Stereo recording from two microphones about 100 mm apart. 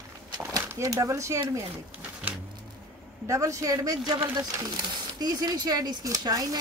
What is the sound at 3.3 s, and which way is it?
Speech, 30° right (ahead or behind).